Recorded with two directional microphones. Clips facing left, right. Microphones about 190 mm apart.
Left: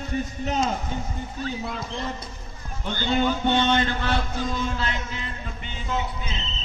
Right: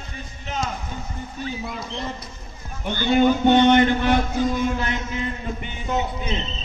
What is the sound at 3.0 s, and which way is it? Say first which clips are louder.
A man's voice: right 6 dB; 15° right (ahead or behind).